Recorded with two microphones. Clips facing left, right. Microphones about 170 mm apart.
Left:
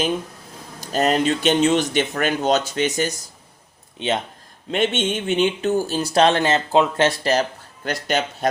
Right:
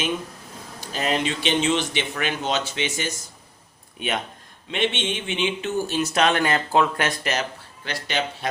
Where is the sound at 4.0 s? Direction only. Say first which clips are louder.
Left 4 dB; 25° left (ahead or behind).